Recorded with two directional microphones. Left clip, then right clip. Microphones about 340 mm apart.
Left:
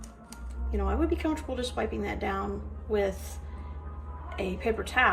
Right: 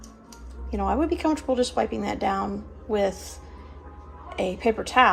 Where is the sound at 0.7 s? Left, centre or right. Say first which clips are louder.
Right 5 dB; centre.